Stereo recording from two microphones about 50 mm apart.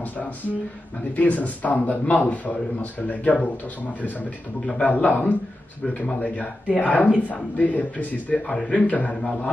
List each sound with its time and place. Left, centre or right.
1.1 s a man's voice: left
4.6 s speech: left
4.9 s a man's voice: left